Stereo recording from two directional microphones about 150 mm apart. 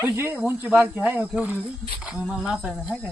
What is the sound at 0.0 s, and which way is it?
A child's voice, 15° right (ahead or behind).